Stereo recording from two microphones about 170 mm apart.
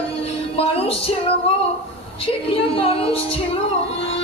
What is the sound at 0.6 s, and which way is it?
Music, 35° left (ahead or behind).